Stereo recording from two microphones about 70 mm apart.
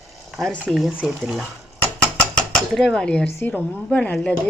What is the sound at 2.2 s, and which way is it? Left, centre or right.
Dishes, centre.